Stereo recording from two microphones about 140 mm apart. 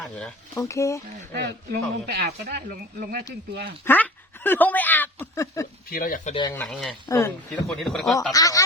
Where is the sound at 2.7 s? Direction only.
90° right.